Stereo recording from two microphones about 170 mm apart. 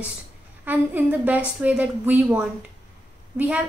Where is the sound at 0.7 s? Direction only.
10° right (ahead or behind).